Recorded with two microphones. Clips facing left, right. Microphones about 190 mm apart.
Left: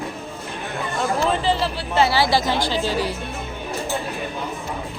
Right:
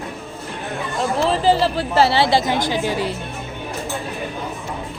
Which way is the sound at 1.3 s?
40° right (ahead or behind).